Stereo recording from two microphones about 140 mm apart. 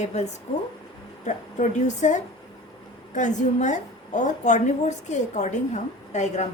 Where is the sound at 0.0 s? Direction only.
55° left (ahead or behind).